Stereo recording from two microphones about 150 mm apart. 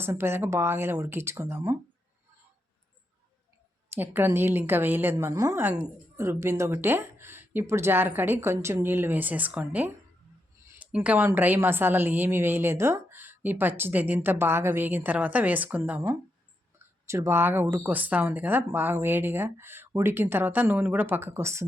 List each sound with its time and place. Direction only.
0.0 s a woman's voice: 15° right (ahead or behind)
3.8 s a woman's voice: 15° right (ahead or behind)
10.7 s a sound: 10° right (ahead or behind)
11.3 s a woman's voice: 15° right (ahead or behind)